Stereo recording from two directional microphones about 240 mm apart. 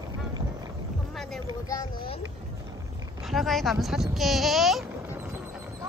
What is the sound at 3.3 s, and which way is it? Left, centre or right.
Speech, centre.